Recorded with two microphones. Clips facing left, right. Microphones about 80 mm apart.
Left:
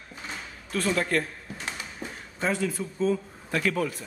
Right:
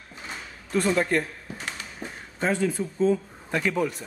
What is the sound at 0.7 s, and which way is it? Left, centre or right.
Speech, centre.